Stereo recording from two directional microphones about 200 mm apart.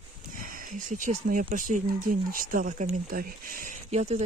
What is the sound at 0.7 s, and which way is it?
Speech, 40° right (ahead or behind).